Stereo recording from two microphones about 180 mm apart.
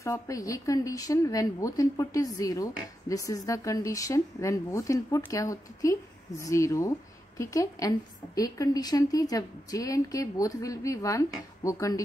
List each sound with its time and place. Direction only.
0.0 s a woman's voice: 20° left (ahead or behind)